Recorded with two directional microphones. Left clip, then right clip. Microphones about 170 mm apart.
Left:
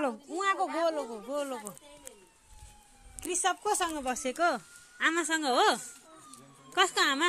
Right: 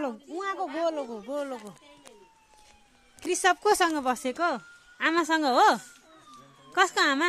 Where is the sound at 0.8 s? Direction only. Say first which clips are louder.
Right 1 dB; 35° right (ahead or behind).